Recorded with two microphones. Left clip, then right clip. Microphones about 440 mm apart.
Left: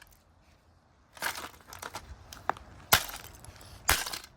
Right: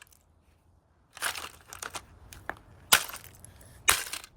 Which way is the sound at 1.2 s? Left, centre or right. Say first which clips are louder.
Right 1 dB; centre.